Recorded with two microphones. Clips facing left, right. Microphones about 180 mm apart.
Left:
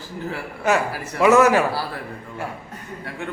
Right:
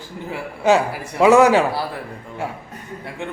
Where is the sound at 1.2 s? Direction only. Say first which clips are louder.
Right 2 dB; 20° right (ahead or behind).